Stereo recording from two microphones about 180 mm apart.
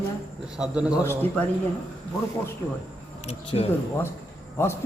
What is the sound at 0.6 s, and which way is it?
Speech, 5° right (ahead or behind).